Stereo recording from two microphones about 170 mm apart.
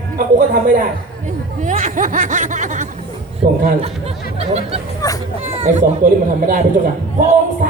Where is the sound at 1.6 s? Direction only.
50° right (ahead or behind).